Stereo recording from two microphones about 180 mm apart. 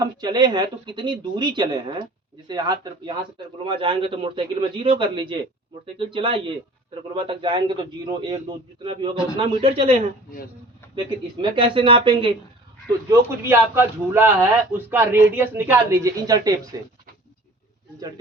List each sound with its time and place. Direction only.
0.0 s a man's voice: 25° right (ahead or behind)
3.3 s a man's voice: 30° right (ahead or behind)
10.9 s a man's voice: 30° right (ahead or behind)
13.1 s speech: 15° right (ahead or behind)